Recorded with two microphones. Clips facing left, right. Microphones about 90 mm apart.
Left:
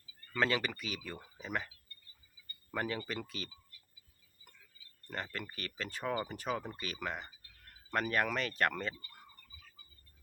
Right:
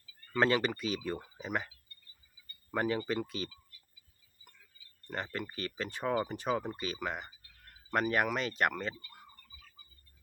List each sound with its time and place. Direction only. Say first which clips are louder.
0.3 s speech: right 4 dB; 30° right (ahead or behind)
2.7 s speech: right 6 dB; 25° right (ahead or behind)
5.0 s speech: right 3 dB; 20° right (ahead or behind)